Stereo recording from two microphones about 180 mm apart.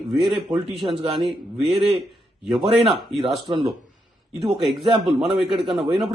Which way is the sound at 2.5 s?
Centre (ahead or behind).